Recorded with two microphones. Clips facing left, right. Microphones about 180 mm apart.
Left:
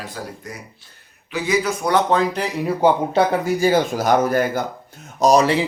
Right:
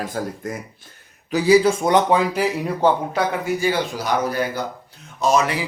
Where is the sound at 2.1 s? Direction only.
10° right (ahead or behind).